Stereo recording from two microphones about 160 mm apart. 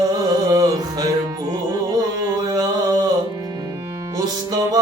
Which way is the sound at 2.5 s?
25° right (ahead or behind).